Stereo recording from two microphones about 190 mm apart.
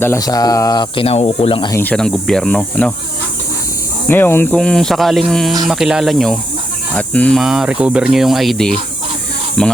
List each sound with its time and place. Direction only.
0.0 s speech: 15° left (ahead or behind)
1.7 s speech: 10° left (ahead or behind)
4.1 s speech: 10° left (ahead or behind)